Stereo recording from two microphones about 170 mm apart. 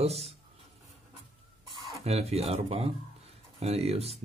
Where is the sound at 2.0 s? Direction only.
40° right (ahead or behind).